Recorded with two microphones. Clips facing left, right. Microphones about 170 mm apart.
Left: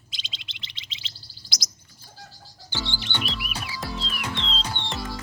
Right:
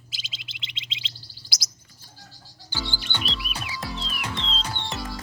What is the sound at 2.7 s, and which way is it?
Music, 10° right (ahead or behind).